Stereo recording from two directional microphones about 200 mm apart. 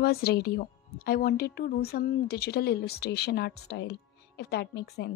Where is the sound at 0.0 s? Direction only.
50° left (ahead or behind).